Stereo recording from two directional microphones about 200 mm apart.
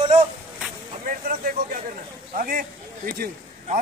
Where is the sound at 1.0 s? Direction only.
45° right (ahead or behind).